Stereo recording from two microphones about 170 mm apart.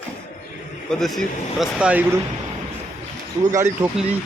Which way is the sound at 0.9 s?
Centre (ahead or behind).